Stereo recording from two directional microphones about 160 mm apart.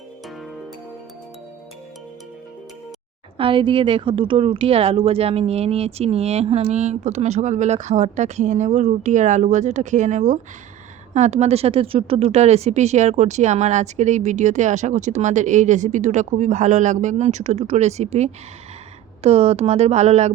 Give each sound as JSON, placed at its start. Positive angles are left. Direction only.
{"t": 3.3, "sound": "a woman's voice", "side_deg": -35}